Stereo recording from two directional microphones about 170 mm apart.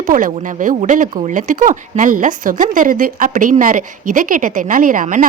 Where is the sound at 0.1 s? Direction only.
50° right (ahead or behind).